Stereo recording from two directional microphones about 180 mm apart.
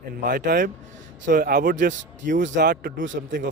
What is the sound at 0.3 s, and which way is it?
Speech, 60° right (ahead or behind).